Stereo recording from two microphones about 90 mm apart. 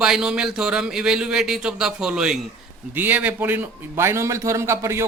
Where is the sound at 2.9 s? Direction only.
20° right (ahead or behind).